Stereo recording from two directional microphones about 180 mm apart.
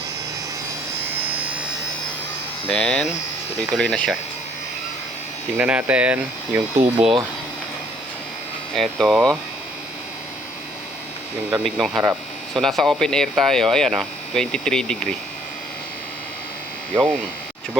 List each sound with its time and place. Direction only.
2.7 s speech: 5° left (ahead or behind)
5.5 s speech: 5° right (ahead or behind)
6.7 s speech: 35° right (ahead or behind)
8.7 s speech: centre (ahead or behind)
11.5 s speech: centre (ahead or behind)